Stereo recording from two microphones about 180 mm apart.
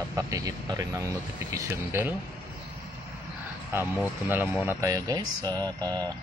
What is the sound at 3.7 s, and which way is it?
Speech, 10° right (ahead or behind).